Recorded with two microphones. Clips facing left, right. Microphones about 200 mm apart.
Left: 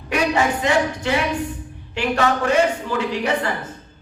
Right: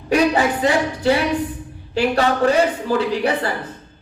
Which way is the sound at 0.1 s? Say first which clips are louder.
Right 3 dB; 35° right (ahead or behind).